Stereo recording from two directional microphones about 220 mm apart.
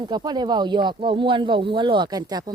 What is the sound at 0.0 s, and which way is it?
Speech, 20° right (ahead or behind).